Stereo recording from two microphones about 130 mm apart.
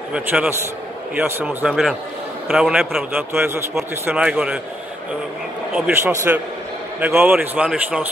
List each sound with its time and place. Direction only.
0.1 s speech: 10° right (ahead or behind)
1.7 s a man's voice: centre (ahead or behind)
3.1 s speech: 15° right (ahead or behind)
5.9 s speech: 15° right (ahead or behind)